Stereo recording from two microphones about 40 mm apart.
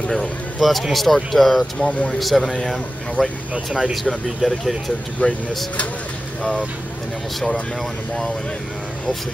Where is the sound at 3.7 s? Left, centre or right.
Right.